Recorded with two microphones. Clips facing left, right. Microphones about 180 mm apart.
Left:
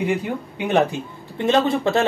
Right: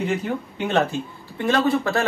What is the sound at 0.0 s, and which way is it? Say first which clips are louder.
Speech: left 1 dB; 10° left (ahead or behind).